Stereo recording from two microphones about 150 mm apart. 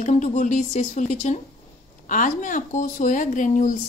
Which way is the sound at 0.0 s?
50° left (ahead or behind).